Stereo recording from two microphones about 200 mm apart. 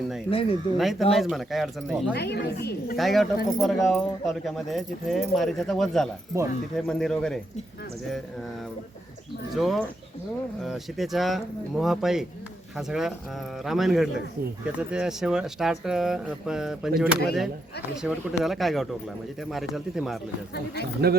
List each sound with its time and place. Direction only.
0.3 s speech: 30° left (ahead or behind)
0.8 s speech: centre (ahead or behind)
2.1 s a woman's voice: 55° left (ahead or behind)
3.0 s speech: centre (ahead or behind)
9.6 s speech: centre (ahead or behind)
21.0 s speech: 50° right (ahead or behind)